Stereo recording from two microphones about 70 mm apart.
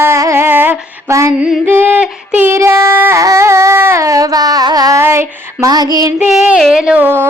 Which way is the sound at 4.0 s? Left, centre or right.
Right.